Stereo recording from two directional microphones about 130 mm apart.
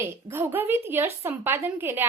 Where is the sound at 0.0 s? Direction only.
15° right (ahead or behind).